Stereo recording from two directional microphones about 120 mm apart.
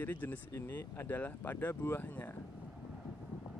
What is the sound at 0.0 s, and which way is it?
Speech, 15° left (ahead or behind).